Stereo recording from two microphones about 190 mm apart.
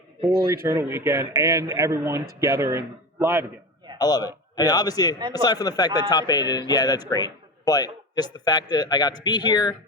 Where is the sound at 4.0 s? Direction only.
20° left (ahead or behind).